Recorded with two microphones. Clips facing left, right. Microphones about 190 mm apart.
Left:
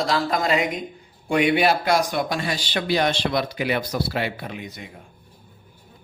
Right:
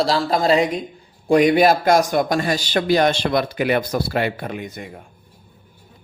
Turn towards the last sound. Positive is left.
turn(degrees=-50)  # may be behind; listen again after turning